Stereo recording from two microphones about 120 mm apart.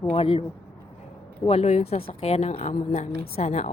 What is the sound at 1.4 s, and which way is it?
A woman's voice, 60° left (ahead or behind).